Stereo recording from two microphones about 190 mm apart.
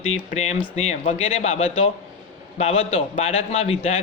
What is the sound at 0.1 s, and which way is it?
A man's voice, 35° left (ahead or behind).